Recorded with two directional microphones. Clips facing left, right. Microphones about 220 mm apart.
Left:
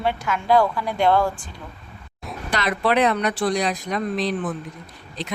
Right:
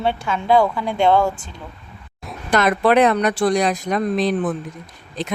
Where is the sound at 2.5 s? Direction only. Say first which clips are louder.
Right 6 dB; 50° right (ahead or behind).